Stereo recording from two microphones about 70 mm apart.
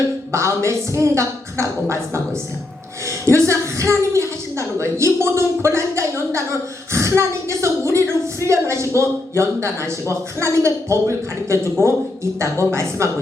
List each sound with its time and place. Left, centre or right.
0.3 s a woman's voice: right